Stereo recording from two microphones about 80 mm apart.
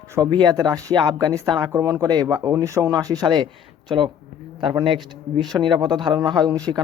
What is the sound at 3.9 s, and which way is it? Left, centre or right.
Speech, right.